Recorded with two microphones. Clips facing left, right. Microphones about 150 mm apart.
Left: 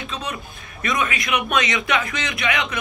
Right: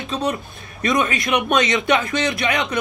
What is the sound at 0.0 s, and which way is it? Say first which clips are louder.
Speech: right 7 dB; 40° right (ahead or behind).